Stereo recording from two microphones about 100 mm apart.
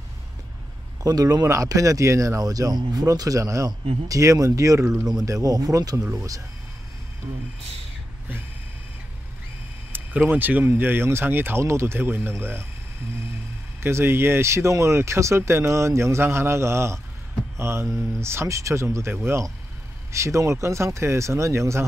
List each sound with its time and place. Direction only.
1.0 s speech: 40° right (ahead or behind)
9.9 s speech: 20° right (ahead or behind)
13.7 s speech: 25° right (ahead or behind)
17.6 s mantra: 25° right (ahead or behind)
18.2 s speech: 25° right (ahead or behind)